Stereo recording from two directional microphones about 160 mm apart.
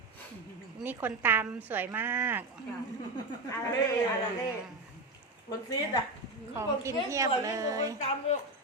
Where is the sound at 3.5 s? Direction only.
15° left (ahead or behind).